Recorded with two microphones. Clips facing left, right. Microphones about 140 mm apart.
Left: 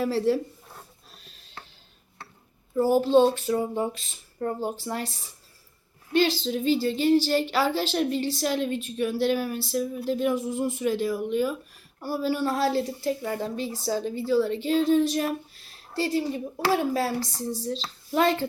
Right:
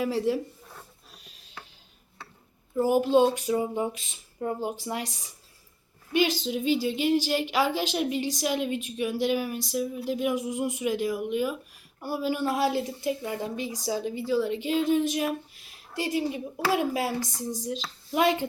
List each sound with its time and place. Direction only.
0.0 s a woman's voice: 10° right (ahead or behind)
2.7 s a woman's voice: 15° right (ahead or behind)
6.1 s a woman's voice: 15° right (ahead or behind)